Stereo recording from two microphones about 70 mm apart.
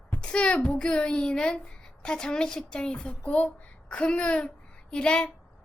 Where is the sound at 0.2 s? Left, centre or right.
Centre.